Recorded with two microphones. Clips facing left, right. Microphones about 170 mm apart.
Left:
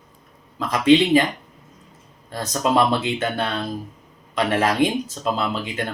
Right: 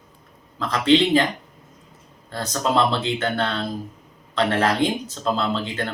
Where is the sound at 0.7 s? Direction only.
15° left (ahead or behind).